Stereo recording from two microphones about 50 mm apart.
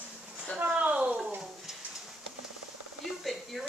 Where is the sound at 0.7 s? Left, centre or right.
Right.